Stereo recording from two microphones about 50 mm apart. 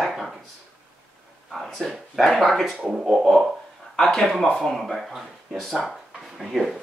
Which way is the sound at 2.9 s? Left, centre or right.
Centre.